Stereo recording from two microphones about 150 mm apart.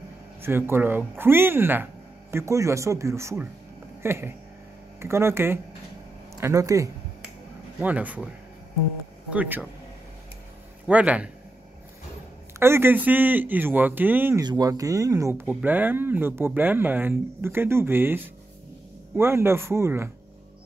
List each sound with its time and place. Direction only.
0.4 s speech: 15° right (ahead or behind)
7.8 s speech: 10° right (ahead or behind)
9.3 s speech: 10° right (ahead or behind)
10.9 s speech: 10° right (ahead or behind)
12.5 s speech: 15° right (ahead or behind)
14.4 s speech: 25° right (ahead or behind)